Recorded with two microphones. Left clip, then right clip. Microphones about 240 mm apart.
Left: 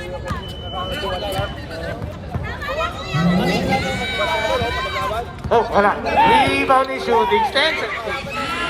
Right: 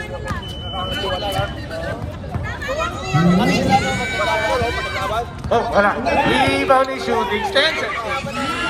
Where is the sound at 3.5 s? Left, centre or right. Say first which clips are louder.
Right 3 dB; left.